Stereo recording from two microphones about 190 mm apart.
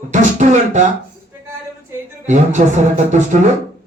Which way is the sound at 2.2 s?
40° right (ahead or behind).